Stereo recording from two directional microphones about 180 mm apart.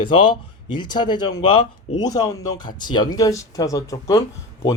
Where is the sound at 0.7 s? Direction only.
25° left (ahead or behind).